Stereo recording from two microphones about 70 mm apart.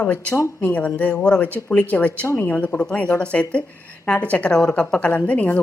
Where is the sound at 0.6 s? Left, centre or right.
Left.